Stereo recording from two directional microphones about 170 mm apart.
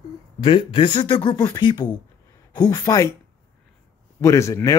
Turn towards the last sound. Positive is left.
turn(degrees=15)  # may be behind; listen again after turning